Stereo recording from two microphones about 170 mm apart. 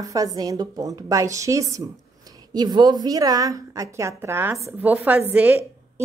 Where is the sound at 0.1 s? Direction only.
20° right (ahead or behind).